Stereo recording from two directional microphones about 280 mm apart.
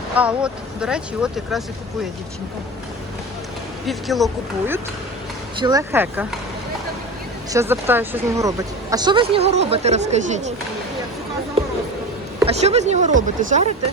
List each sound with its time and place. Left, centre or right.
0.2 s speech: centre
3.8 s speech: centre
5.5 s speech: centre
7.5 s speech: centre; by 10.5 s right
11.6 s a sound: right
12.5 s speech: right